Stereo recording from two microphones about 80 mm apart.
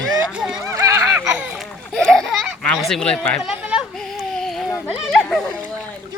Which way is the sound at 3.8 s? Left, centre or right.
Centre.